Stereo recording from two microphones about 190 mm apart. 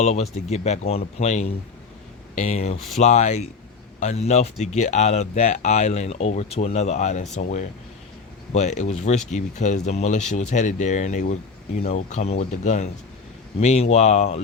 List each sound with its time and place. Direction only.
0.0 s speech: 35° left (ahead or behind)
8.5 s speech: 35° left (ahead or behind)